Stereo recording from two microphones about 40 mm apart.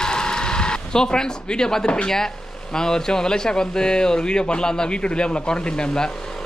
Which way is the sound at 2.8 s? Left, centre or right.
Centre.